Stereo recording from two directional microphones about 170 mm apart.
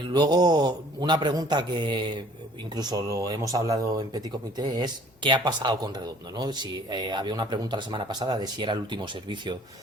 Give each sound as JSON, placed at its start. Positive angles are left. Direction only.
{"t": 0.0, "sound": "speech", "side_deg": -25}